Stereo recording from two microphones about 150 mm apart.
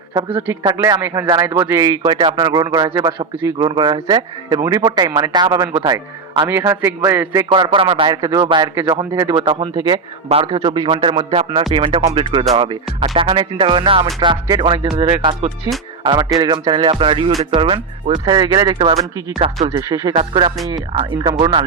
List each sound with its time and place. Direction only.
0.3 s speech: 10° right (ahead or behind)
0.6 s speech: 25° right (ahead or behind)
2.0 s speech: 30° right (ahead or behind)
6.5 s speech: 15° right (ahead or behind)
7.5 s a man's voice: 35° right (ahead or behind)
19.7 s a man's voice: 25° right (ahead or behind)